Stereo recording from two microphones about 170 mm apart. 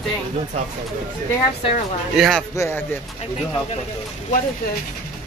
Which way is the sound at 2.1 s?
Centre (ahead or behind).